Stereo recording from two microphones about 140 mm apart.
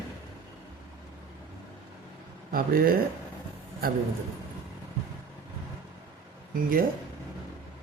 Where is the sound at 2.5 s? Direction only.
90° right.